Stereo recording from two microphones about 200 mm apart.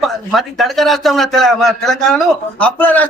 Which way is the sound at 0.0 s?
Centre (ahead or behind).